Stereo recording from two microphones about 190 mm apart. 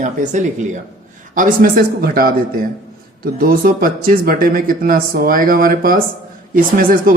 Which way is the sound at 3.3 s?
50° right (ahead or behind).